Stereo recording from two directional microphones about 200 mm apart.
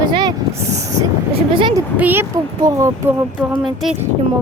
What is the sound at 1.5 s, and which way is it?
Speech, 25° right (ahead or behind).